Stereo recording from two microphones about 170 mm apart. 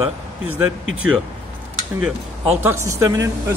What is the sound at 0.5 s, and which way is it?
Speech, 10° right (ahead or behind).